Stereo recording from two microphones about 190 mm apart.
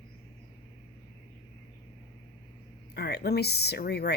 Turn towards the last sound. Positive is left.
turn(degrees=60)  # may be behind; listen again after turning